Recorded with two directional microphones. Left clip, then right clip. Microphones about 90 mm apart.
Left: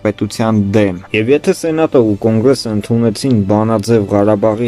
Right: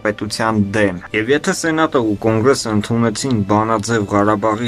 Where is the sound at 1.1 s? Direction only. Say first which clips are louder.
Left 4 dB; 20° left (ahead or behind).